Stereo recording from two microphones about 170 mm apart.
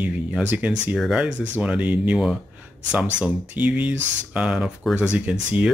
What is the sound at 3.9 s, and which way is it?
Speech, 90° right.